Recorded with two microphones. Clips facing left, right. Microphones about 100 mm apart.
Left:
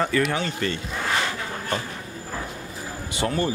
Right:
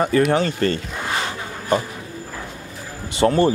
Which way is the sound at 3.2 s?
35° right (ahead or behind).